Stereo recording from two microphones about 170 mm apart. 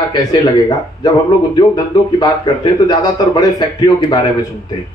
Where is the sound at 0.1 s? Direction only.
20° left (ahead or behind).